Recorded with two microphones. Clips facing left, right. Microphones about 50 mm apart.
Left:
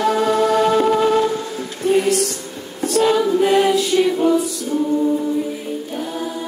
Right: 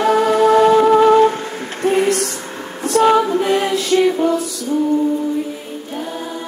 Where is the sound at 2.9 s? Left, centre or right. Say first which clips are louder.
Right 3 dB; right.